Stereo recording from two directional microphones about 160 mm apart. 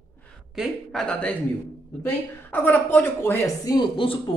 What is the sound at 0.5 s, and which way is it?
A woman's voice, centre (ahead or behind).